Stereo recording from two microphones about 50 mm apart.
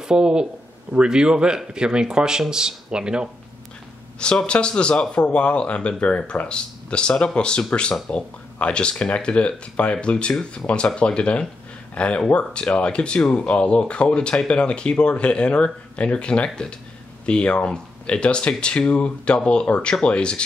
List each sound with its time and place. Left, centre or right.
0.0 s speech: centre
4.2 s speech: centre